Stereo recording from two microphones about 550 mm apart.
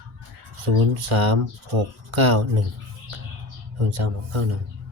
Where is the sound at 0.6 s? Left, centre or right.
Right.